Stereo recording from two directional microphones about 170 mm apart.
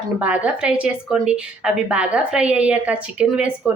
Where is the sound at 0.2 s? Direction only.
10° right (ahead or behind).